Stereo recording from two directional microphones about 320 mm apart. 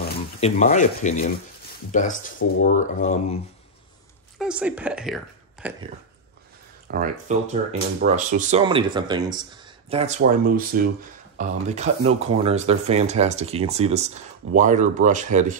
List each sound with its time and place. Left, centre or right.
0.4 s speech: left
4.4 s speech: centre
6.9 s speech: right